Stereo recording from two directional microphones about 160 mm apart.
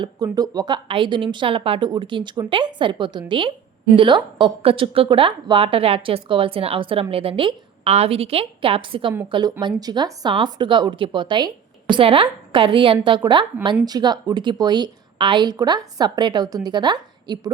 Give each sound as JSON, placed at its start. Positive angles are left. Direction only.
{"t": 0.2, "sound": "a woman's voice", "side_deg": -25}